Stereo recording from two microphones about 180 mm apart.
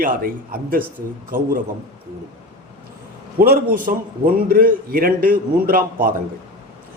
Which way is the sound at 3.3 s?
55° right (ahead or behind).